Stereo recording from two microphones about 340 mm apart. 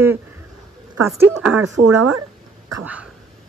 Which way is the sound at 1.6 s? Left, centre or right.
Right.